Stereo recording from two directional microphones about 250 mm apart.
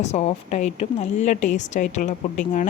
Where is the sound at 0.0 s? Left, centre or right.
Left.